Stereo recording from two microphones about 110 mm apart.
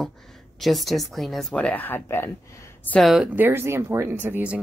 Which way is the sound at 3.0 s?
Centre (ahead or behind).